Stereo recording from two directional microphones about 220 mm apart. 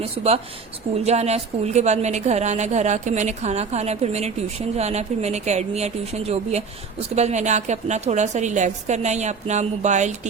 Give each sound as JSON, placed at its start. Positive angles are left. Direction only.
{"t": 1.0, "sound": "a woman's voice", "side_deg": -30}